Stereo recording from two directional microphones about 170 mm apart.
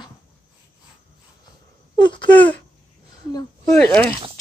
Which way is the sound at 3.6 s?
10° left (ahead or behind).